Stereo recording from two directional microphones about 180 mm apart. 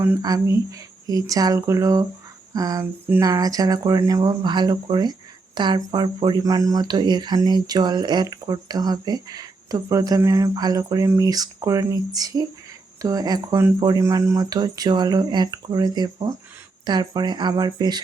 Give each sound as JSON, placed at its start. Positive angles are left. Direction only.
{"t": 0.0, "sound": "speech", "side_deg": -15}